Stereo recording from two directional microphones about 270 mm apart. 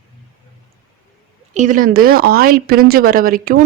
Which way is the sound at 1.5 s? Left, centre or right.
Right.